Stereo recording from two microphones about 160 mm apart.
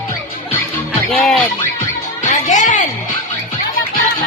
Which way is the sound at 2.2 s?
50° left (ahead or behind).